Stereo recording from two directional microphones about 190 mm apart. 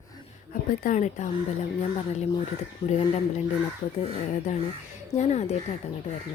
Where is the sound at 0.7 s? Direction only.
45° left (ahead or behind).